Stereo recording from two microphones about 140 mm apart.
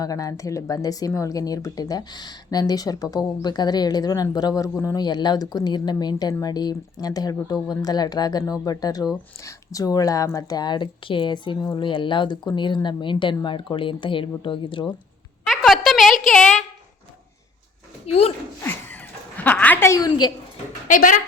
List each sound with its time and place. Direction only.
0.0 s speech: 25° left (ahead or behind)
15.4 s a sound: centre (ahead or behind)
16.2 s a woman's voice: 5° left (ahead or behind)
18.0 s speech: 45° left (ahead or behind)
18.6 s a sound: 15° left (ahead or behind)
19.5 s a woman's voice: 10° left (ahead or behind); by 20.3 s 30° left (ahead or behind)
20.8 s speech: 70° left (ahead or behind)